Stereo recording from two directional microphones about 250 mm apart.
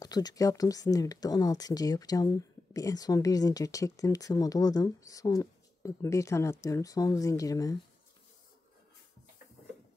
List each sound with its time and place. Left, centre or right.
0.0 s speech: centre